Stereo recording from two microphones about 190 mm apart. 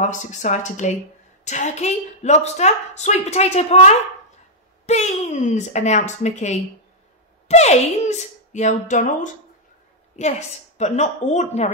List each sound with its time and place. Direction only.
0.0 s a woman's voice: 40° left (ahead or behind)